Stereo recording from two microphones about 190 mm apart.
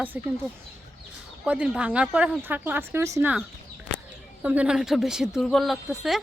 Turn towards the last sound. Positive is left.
turn(degrees=0)  # may be behind; listen again after turning